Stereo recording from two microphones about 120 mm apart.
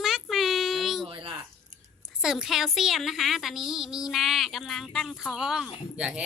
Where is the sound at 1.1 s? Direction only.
45° right (ahead or behind).